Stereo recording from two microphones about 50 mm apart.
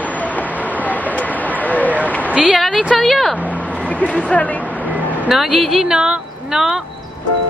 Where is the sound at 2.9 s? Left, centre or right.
Centre.